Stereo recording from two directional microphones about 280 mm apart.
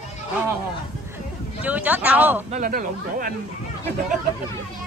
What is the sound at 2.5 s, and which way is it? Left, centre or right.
Speech, right.